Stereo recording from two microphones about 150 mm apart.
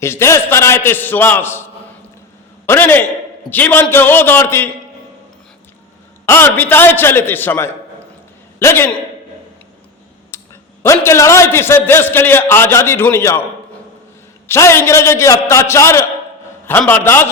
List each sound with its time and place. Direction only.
0.0 s a man's voice: 20° left (ahead or behind)
2.6 s a man's voice: 15° left (ahead or behind)
6.2 s a man's voice: 15° left (ahead or behind)
10.3 s a man's voice: 15° left (ahead or behind)
14.4 s a man's voice: 15° left (ahead or behind)